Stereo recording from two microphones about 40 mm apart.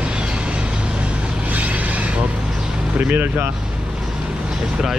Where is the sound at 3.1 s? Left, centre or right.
Right.